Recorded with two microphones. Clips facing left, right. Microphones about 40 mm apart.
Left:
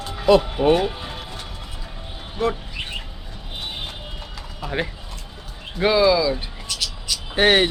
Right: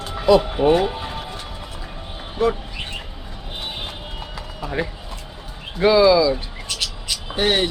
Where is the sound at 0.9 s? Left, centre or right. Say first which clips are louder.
Right 4 dB; centre.